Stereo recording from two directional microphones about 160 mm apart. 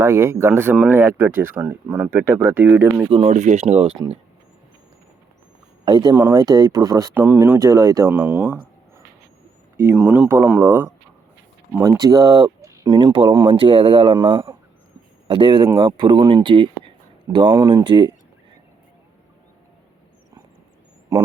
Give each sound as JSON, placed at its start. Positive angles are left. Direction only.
{"t": 0.0, "sound": "speech", "side_deg": -15}
{"t": 3.1, "sound": "speech", "side_deg": -40}
{"t": 5.8, "sound": "speech", "side_deg": -25}
{"t": 9.7, "sound": "speech", "side_deg": -10}
{"t": 11.8, "sound": "speech", "side_deg": -20}